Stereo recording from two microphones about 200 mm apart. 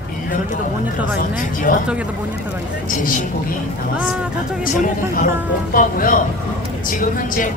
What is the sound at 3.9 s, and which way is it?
Speech, 5° right (ahead or behind).